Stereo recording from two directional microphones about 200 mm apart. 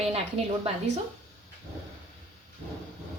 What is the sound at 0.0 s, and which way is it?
Speech, 30° right (ahead or behind).